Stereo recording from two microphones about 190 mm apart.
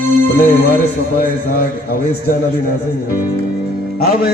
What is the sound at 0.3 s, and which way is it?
Speech, 55° left (ahead or behind).